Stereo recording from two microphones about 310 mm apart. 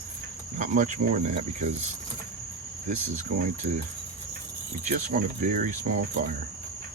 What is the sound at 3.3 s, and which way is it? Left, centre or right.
Cricket, right.